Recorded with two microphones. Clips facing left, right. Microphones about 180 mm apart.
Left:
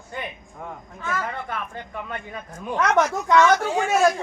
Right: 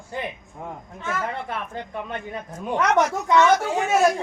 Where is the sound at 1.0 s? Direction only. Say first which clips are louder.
Right 1 dB; 25° right (ahead or behind).